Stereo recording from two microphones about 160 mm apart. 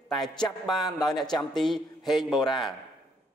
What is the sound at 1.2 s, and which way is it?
A man's voice, centre (ahead or behind).